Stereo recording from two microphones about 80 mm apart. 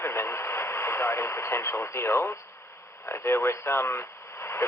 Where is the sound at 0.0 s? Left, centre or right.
Left.